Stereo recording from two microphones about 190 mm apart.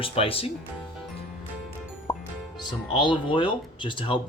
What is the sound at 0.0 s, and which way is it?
Speech, 30° left (ahead or behind).